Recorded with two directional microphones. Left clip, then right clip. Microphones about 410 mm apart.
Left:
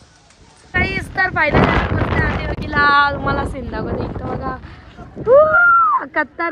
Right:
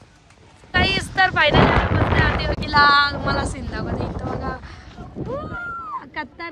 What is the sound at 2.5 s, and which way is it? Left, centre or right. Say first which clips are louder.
Speech: right 2 dB; centre.